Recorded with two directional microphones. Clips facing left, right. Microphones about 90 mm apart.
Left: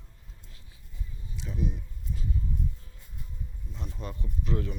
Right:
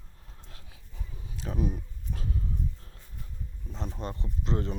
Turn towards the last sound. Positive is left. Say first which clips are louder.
# right 1 dB
turn(degrees=-30)  # may be behind; listen again after turning